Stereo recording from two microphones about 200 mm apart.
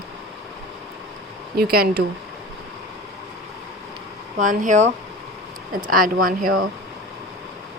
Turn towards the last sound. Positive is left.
turn(degrees=-45)  # may be behind; listen again after turning